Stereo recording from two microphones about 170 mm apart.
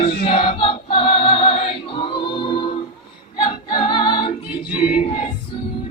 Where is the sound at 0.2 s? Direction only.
30° left (ahead or behind).